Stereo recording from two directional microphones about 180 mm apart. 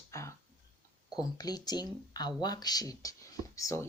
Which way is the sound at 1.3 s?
20° left (ahead or behind).